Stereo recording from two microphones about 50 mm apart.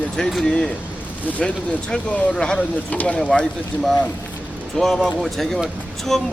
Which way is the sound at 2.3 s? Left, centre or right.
Centre.